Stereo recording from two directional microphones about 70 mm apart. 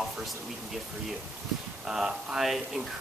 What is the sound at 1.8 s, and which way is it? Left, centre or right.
Speech, centre.